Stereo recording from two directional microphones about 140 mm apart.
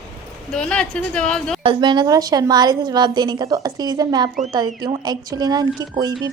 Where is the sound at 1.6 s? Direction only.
35° right (ahead or behind).